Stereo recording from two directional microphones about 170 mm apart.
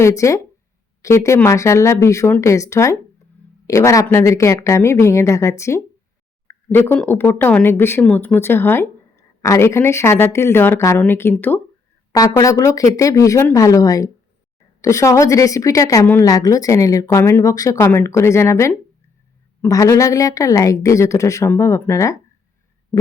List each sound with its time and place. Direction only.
0.0 s a woman's voice: 20° left (ahead or behind)